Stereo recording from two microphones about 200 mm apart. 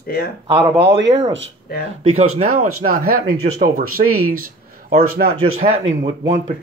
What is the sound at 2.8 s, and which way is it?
Speech, 45° right (ahead or behind).